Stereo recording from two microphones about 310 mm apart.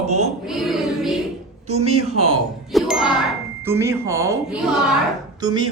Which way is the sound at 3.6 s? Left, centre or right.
Centre.